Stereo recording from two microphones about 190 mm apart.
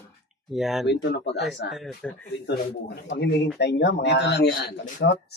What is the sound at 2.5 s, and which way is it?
Speech, 60° left (ahead or behind).